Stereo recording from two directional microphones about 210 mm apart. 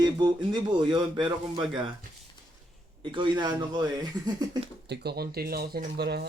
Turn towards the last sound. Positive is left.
turn(degrees=-50)  # may be behind; listen again after turning